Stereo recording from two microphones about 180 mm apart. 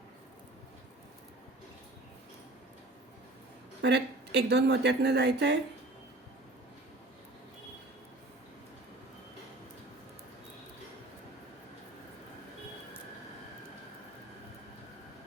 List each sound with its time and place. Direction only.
3.8 s speech: 70° right (ahead or behind)